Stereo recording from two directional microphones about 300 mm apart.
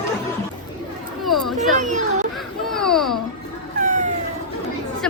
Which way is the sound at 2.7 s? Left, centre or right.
Centre.